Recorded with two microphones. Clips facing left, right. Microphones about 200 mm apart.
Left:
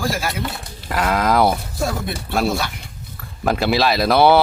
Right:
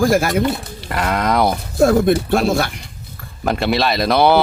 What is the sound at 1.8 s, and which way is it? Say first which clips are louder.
Speech: right 13 dB; 55° right (ahead or behind).